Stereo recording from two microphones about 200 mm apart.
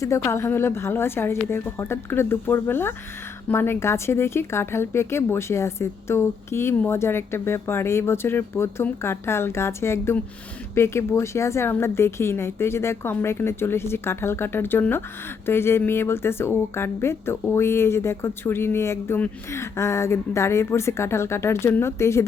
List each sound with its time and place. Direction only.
0.0 s a woman's voice: 15° left (ahead or behind)